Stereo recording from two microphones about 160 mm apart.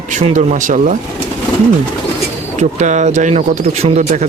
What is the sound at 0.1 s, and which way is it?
Speech, 50° right (ahead or behind).